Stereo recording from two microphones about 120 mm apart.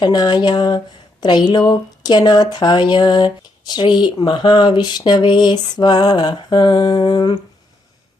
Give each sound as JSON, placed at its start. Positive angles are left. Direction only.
{"t": 0.0, "sound": "speech", "side_deg": 40}